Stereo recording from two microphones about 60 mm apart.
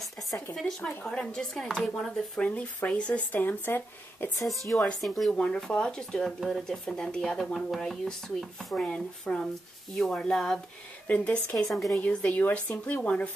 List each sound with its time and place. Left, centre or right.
0.6 s speech: centre; by 4.9 s left
5.0 s speech: centre
5.3 s speech: centre
11.1 s speech: left
11.7 s speech: centre
12.3 s speech: left